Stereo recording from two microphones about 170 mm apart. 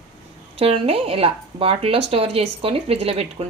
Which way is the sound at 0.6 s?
35° right (ahead or behind).